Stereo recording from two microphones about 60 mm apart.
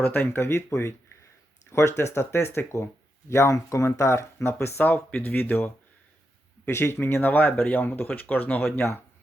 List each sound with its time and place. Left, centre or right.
0.0 s speech: left
4.8 s speech: left
6.7 s speech: left